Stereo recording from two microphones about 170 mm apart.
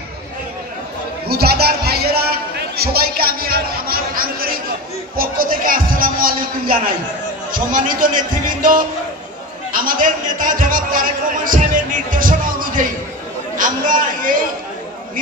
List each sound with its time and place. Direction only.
1.2 s music: 65° right (ahead or behind)
5.1 s a sound: 55° right (ahead or behind)
7.5 s a man's voice: 55° right (ahead or behind)
9.7 s a man's voice: 55° right (ahead or behind)